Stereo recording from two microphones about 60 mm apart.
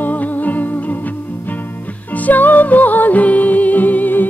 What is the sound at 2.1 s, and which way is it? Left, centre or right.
Music, left.